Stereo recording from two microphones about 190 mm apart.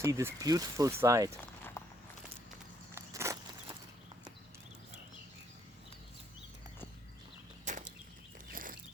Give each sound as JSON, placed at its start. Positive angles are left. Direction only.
{"t": 0.0, "sound": "speech", "side_deg": -15}
{"t": 1.8, "sound": "walk", "side_deg": 15}
{"t": 2.9, "sound": "walk", "side_deg": -15}
{"t": 7.6, "sound": "a sound", "side_deg": -40}